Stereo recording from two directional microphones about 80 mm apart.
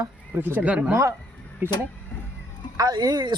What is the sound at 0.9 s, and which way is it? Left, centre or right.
Speech, right.